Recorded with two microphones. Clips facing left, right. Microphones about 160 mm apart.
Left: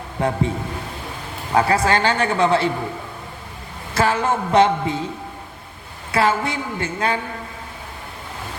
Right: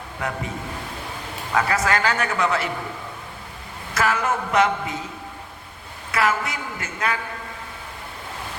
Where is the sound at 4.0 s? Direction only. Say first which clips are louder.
Left 3 dB; 30° left (ahead or behind).